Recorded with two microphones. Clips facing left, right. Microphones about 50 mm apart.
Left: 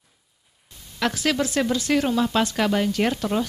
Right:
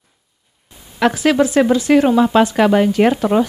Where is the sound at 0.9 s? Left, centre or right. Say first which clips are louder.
Right 9 dB; centre.